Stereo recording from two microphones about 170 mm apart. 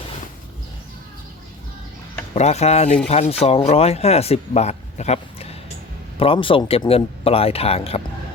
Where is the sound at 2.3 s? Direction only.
40° left (ahead or behind).